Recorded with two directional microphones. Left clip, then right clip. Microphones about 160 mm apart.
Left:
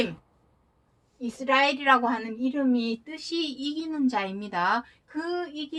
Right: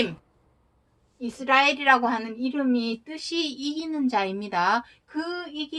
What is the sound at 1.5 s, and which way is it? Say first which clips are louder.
Speech: right 2 dB; 30° right (ahead or behind).